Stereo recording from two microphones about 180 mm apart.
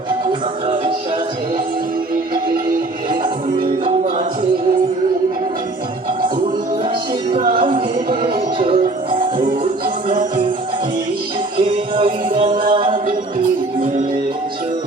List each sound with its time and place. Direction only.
7.5 s music: 30° right (ahead or behind)
11.6 s music: 30° right (ahead or behind)